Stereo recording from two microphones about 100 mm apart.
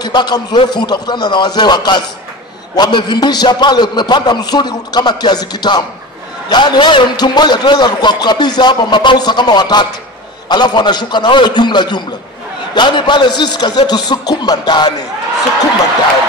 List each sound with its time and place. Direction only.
0.0 s a man's voice: 45° left (ahead or behind)